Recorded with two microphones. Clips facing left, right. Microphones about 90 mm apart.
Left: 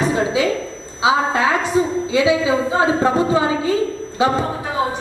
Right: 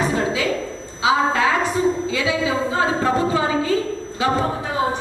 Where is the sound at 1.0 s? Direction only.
20° left (ahead or behind).